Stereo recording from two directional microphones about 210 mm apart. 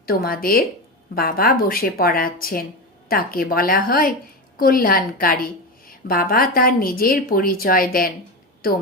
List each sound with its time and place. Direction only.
0.0 s a woman's voice: 45° left (ahead or behind)